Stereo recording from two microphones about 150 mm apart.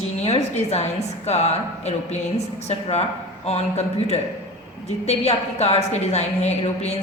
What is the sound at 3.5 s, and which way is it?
A woman's voice, 45° left (ahead or behind).